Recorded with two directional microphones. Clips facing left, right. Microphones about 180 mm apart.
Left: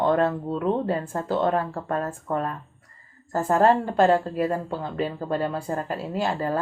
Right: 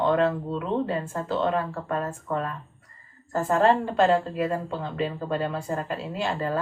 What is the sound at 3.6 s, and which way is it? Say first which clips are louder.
Speech: left 2 dB; 40° left (ahead or behind).